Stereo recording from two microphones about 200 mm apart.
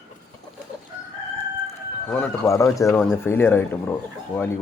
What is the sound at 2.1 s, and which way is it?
A man's voice, 10° left (ahead or behind).